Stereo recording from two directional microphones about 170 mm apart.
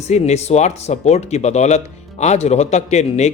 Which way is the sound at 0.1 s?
40° left (ahead or behind).